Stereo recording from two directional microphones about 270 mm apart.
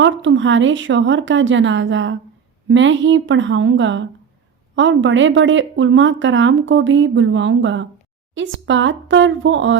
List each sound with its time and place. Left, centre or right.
0.0 s a woman's voice: right